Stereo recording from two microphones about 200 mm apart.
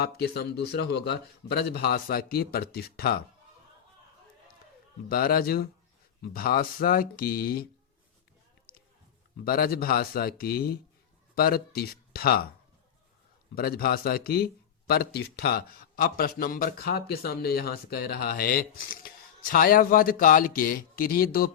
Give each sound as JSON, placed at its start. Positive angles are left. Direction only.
{"t": 0.0, "sound": "a man's voice", "side_deg": 55}
{"t": 5.0, "sound": "a man's voice", "side_deg": 50}
{"t": 9.4, "sound": "a man's voice", "side_deg": 50}
{"t": 13.6, "sound": "a man's voice", "side_deg": 50}